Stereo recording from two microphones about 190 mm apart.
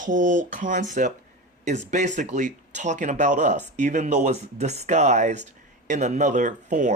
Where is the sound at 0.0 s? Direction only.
40° right (ahead or behind).